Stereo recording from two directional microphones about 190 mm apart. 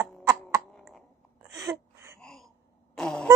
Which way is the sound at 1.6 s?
15° right (ahead or behind).